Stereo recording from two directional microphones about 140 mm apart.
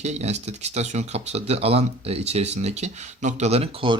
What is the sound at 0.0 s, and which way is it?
Speech, 50° right (ahead or behind).